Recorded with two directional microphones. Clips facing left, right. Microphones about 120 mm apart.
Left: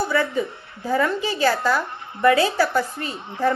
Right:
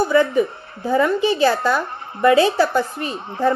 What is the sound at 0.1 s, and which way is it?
Speech, 20° right (ahead or behind).